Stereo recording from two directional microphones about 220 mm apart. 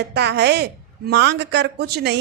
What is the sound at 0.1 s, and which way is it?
A woman's voice, 50° right (ahead or behind).